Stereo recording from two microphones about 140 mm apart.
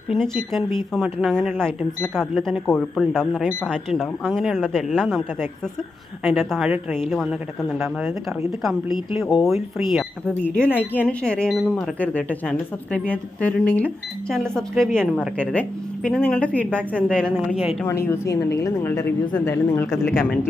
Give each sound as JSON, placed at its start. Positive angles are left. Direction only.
{"t": 0.1, "sound": "a woman's voice", "side_deg": 0}
{"t": 17.8, "sound": "a woman's voice", "side_deg": 20}
{"t": 19.9, "sound": "speech", "side_deg": 0}